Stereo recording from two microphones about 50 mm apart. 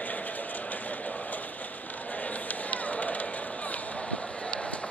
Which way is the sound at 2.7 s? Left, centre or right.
Left.